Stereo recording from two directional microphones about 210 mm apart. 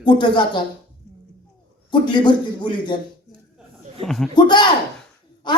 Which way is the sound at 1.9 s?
20° left (ahead or behind).